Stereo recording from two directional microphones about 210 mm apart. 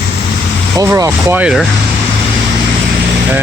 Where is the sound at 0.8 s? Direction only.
15° right (ahead or behind).